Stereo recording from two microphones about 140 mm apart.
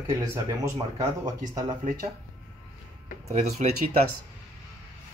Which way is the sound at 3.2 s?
55° right (ahead or behind).